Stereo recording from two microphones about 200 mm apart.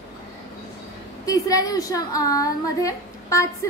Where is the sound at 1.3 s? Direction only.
15° left (ahead or behind).